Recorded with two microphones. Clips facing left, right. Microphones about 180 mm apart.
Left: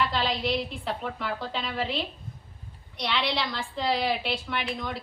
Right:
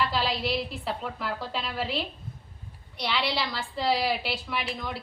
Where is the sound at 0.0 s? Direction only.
5° right (ahead or behind).